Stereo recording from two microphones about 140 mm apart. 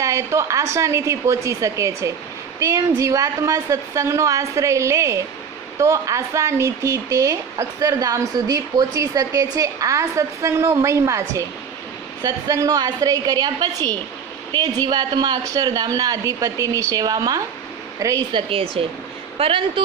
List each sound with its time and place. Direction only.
0.0 s speech: 20° right (ahead or behind); by 19.8 s 40° right (ahead or behind)